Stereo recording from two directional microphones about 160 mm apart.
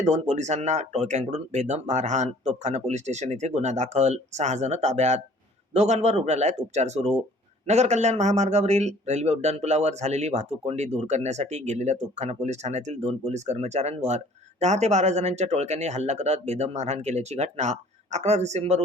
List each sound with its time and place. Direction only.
0.0 s speech: 45° right (ahead or behind)